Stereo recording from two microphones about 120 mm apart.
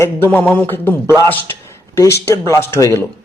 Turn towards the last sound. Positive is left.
turn(degrees=20)  # may be behind; listen again after turning